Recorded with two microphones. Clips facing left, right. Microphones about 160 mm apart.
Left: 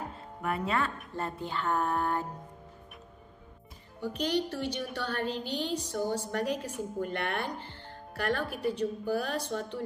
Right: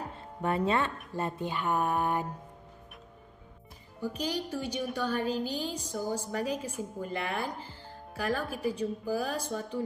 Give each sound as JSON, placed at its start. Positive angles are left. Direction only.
{"t": 0.4, "sound": "a woman's voice", "side_deg": -30}
{"t": 4.2, "sound": "a woman's voice", "side_deg": -5}